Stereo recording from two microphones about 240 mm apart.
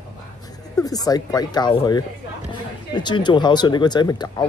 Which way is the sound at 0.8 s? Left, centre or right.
Centre.